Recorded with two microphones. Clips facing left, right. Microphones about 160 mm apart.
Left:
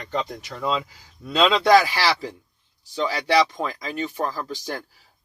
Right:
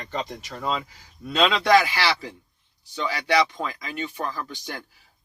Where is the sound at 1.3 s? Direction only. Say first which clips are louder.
Left 3 dB; 30° left (ahead or behind).